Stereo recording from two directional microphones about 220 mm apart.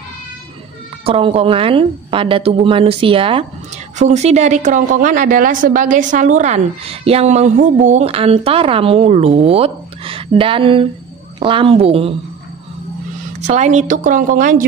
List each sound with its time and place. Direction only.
1.0 s a woman's voice: 25° right (ahead or behind)
13.5 s a woman's voice: 30° right (ahead or behind)